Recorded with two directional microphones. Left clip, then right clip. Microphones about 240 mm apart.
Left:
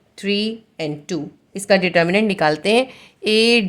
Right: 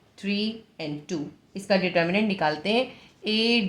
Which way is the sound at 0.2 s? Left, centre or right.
Left.